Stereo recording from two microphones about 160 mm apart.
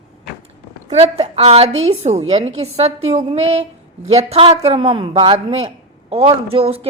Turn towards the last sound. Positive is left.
turn(degrees=-35)  # may be behind; listen again after turning